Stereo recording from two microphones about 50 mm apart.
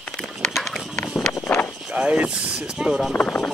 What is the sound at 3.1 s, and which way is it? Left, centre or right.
Speech, left.